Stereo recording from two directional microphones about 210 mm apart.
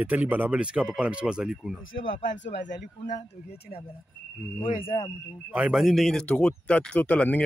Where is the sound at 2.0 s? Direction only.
60° left (ahead or behind).